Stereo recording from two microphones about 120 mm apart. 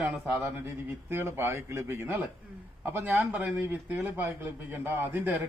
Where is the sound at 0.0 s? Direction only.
20° right (ahead or behind).